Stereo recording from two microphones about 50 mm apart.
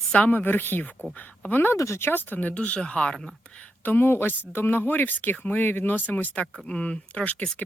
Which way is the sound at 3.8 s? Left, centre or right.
Left.